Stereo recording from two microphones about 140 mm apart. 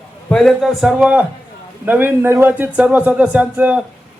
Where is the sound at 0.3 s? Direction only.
5° left (ahead or behind).